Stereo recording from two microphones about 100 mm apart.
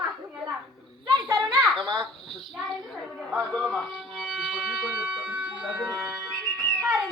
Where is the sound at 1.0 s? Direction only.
45° right (ahead or behind).